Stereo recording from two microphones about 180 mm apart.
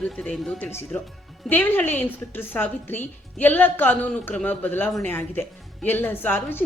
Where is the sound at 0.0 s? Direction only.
5° left (ahead or behind).